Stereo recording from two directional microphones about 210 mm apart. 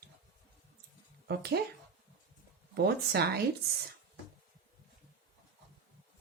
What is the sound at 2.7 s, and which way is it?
Speech, 50° right (ahead or behind).